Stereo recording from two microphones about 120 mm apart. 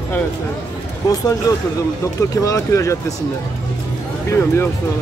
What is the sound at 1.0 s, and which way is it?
Speech, 30° left (ahead or behind).